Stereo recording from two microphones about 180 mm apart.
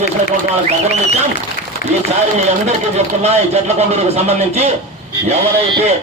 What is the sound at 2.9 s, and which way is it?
Speech, 35° right (ahead or behind).